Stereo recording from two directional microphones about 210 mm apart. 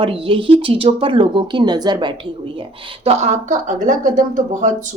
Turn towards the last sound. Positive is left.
turn(degrees=-35)  # may be behind; listen again after turning